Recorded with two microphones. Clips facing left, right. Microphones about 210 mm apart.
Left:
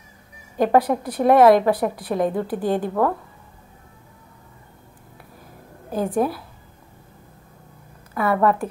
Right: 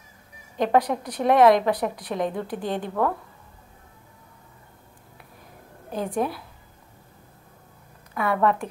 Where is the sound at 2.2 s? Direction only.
45° left (ahead or behind).